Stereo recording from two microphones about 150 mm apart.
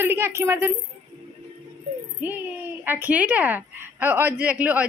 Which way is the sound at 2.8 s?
15° right (ahead or behind).